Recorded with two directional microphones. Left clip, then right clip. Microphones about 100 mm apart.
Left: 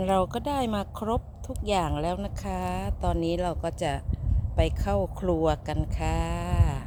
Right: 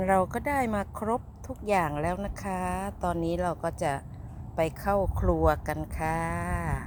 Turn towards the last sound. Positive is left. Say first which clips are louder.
# right 1 dB
turn(degrees=25)  # may be behind; listen again after turning